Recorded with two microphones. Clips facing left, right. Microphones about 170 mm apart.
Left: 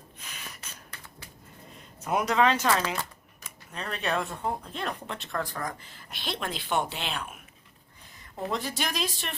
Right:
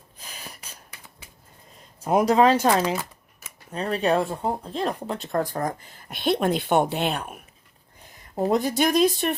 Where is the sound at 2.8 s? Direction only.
10° right (ahead or behind).